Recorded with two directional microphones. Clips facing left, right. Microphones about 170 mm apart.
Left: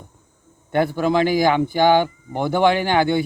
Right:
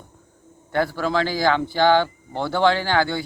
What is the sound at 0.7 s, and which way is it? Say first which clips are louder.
A man's voice: left 4 dB; 20° left (ahead or behind).